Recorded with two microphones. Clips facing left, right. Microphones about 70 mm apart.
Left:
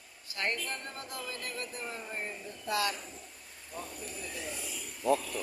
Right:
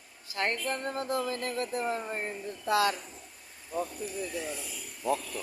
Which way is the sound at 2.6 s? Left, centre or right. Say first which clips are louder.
Right 6 dB; right.